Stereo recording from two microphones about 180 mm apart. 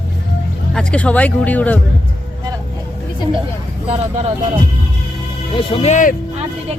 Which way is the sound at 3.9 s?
35° right (ahead or behind).